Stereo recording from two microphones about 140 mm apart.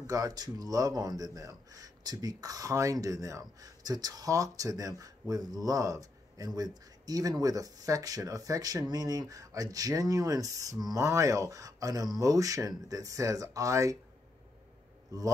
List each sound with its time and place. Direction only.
0.0 s speech: 25° right (ahead or behind)
15.1 s speech: 25° right (ahead or behind)